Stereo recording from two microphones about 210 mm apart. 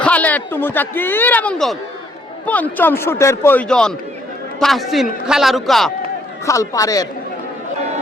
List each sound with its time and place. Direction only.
0.0 s a man's voice: 5° left (ahead or behind)
6.4 s speech: 15° left (ahead or behind)